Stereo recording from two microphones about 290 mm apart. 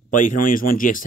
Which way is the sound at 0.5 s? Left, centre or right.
Left.